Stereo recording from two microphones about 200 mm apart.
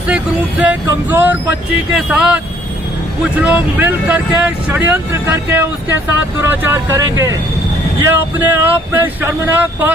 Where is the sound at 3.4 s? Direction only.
5° right (ahead or behind).